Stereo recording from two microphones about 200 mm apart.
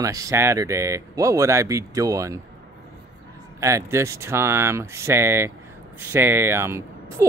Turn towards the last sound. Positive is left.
turn(degrees=-15)  # may be behind; listen again after turning